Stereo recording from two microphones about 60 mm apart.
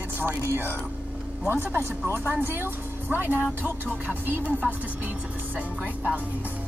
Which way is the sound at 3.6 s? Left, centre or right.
Right.